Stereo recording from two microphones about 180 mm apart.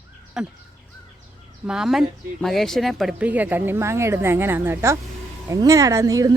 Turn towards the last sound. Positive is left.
turn(degrees=-20)  # may be behind; listen again after turning